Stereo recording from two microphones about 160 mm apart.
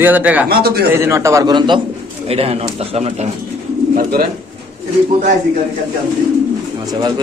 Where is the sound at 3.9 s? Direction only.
65° right (ahead or behind).